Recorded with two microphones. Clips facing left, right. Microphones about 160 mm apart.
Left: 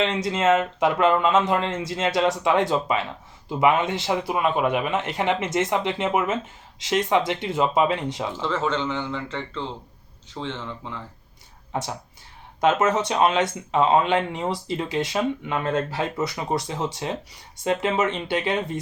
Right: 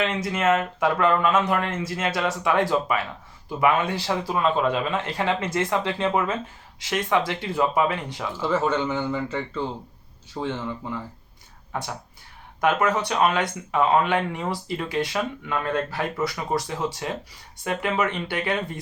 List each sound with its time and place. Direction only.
0.0 s speech: 25° left (ahead or behind)
8.4 s speech: 10° right (ahead or behind)
11.7 s speech: 20° left (ahead or behind)